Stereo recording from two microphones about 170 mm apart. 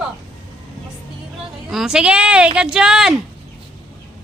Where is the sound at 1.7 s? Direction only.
Centre (ahead or behind).